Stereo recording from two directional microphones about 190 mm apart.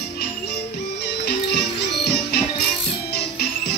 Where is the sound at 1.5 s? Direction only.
60° left (ahead or behind).